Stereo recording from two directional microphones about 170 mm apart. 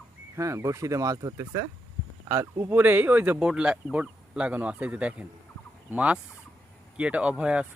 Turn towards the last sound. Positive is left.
turn(degrees=-5)  # may be behind; listen again after turning